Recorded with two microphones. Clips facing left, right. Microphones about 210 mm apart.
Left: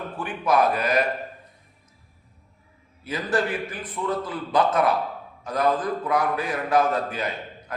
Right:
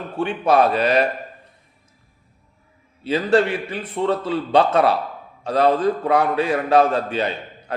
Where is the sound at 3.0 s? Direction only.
30° right (ahead or behind).